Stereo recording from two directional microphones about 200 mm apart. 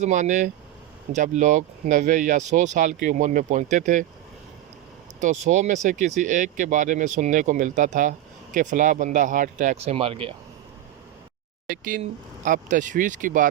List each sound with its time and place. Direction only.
0.0 s speech: 40° right (ahead or behind)
5.2 s speech: 35° right (ahead or behind)
11.7 s speech: 40° right (ahead or behind)